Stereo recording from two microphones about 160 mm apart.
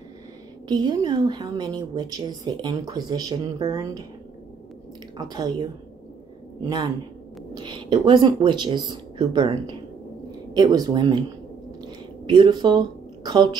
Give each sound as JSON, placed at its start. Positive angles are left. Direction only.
{"t": 0.7, "sound": "a woman's voice", "side_deg": -25}
{"t": 5.1, "sound": "a woman's voice", "side_deg": -25}
{"t": 10.5, "sound": "a woman's voice", "side_deg": -25}
{"t": 12.4, "sound": "a woman's voice", "side_deg": -25}